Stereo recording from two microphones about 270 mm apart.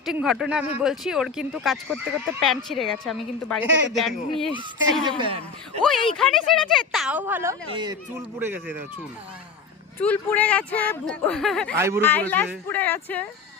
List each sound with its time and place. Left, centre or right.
0.0 s speech: centre
5.0 s speech: centre
5.8 s speech: centre
10.0 s speech: centre
11.8 s speech: centre
12.0 s speech: centre